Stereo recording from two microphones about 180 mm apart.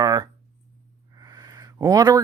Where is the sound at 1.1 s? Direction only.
20° right (ahead or behind).